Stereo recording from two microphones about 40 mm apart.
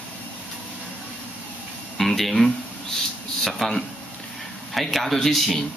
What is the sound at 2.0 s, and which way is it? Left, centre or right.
Speech, centre.